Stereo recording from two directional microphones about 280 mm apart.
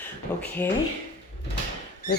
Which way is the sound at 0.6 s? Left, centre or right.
Centre.